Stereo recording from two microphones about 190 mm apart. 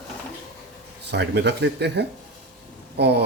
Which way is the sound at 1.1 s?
65° right (ahead or behind).